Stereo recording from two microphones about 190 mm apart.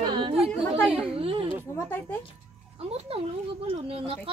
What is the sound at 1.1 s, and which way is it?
Speech, 30° right (ahead or behind).